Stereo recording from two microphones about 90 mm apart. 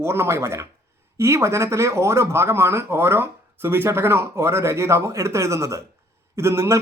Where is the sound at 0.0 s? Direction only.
30° right (ahead or behind).